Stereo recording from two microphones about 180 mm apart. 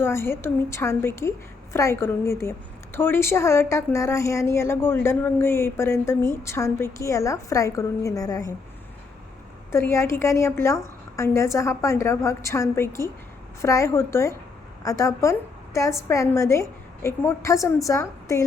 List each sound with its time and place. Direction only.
0.0 s a woman's voice: 15° left (ahead or behind)
9.7 s a woman's voice: 15° left (ahead or behind)